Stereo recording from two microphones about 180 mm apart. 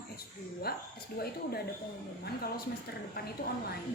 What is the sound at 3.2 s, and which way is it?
Speech, 60° left (ahead or behind).